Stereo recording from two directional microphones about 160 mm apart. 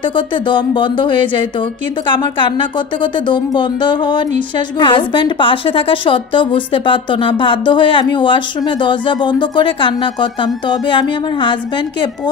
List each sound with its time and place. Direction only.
0.1 s a woman's voice: 30° left (ahead or behind)